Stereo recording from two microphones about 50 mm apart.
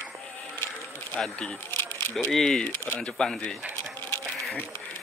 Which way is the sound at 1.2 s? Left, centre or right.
Centre.